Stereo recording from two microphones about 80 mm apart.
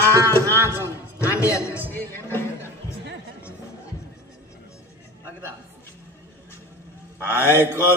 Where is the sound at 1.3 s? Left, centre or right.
Left.